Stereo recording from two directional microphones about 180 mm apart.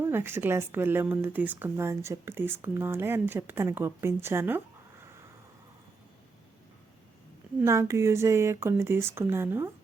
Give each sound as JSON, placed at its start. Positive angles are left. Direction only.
{"t": 0.0, "sound": "speech", "side_deg": -10}
{"t": 7.6, "sound": "speech", "side_deg": -15}